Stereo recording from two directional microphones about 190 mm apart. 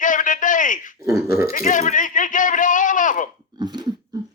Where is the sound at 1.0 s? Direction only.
15° right (ahead or behind).